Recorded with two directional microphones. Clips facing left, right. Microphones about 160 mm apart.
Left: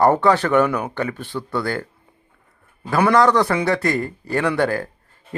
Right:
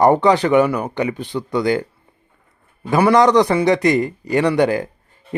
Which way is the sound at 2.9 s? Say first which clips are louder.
Right 3 dB; 15° right (ahead or behind).